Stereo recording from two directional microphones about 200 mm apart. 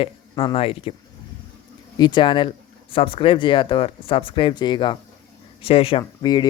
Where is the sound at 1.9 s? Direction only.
20° left (ahead or behind).